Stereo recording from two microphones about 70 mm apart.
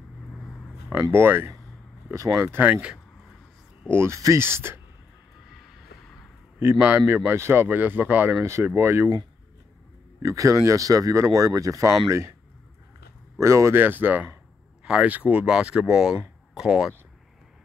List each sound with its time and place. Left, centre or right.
1.1 s speech: right
2.1 s speech: right
2.6 s speech: right
3.8 s speech: right
6.8 s speech: right
10.2 s speech: right
13.4 s speech: right
13.7 s speech: right
15.4 s speech: centre